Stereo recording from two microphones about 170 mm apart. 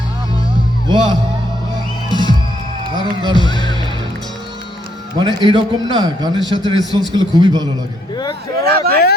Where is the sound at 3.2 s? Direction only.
25° right (ahead or behind).